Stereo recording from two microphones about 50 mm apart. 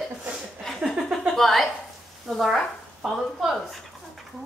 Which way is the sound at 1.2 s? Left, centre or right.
Centre.